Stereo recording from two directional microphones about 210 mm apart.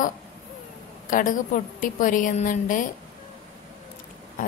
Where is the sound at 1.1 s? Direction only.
40° left (ahead or behind).